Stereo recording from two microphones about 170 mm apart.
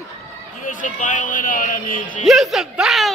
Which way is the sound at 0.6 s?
50° left (ahead or behind).